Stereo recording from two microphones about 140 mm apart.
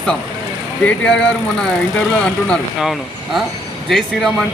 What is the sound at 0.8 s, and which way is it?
Speech, 10° left (ahead or behind).